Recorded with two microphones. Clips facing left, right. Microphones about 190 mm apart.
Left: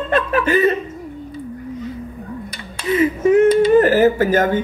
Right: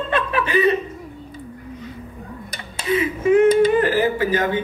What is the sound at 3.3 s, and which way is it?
A man's voice, 45° left (ahead or behind).